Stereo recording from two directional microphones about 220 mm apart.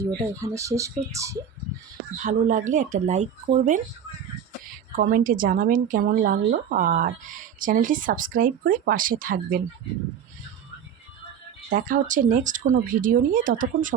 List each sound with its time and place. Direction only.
0.0 s speech: 15° right (ahead or behind)
2.1 s speech: 35° right (ahead or behind)
4.9 s speech: 40° right (ahead or behind)
11.7 s speech: 35° right (ahead or behind)